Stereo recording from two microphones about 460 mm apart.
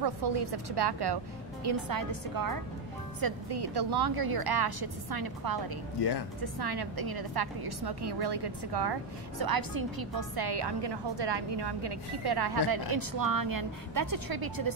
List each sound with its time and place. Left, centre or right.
0.0 s a woman's voice: right
5.9 s speech: left
6.4 s a woman's voice: right